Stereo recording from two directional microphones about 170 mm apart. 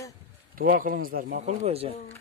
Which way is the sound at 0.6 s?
55° right (ahead or behind).